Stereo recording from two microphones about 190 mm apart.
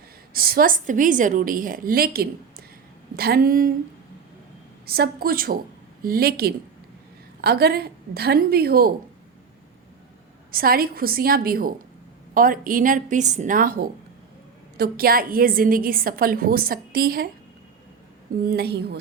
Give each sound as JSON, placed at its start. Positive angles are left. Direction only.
{"t": 0.3, "sound": "a woman's voice", "side_deg": -50}
{"t": 4.9, "sound": "a woman's voice", "side_deg": -50}
{"t": 10.5, "sound": "a woman's voice", "side_deg": -50}
{"t": 18.4, "sound": "a woman's voice", "side_deg": -60}